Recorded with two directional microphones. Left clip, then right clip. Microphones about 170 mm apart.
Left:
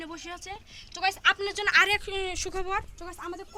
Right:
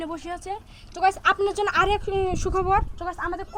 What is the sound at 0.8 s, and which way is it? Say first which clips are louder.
Speech: right 7 dB; 65° right (ahead or behind).